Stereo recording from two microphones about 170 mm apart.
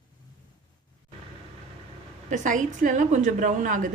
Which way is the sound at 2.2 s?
45° right (ahead or behind).